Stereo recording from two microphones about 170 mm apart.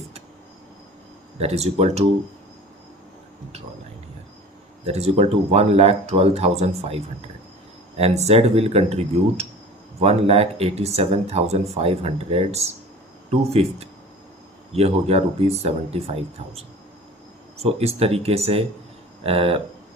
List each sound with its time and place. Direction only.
1.4 s speech: 40° right (ahead or behind)
4.9 s speech: 40° right (ahead or behind)